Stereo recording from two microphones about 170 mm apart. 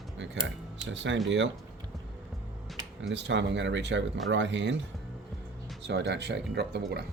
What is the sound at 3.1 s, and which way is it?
Speech, 90° right.